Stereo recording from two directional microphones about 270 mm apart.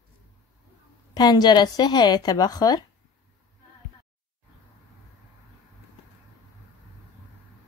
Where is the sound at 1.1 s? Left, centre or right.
Centre.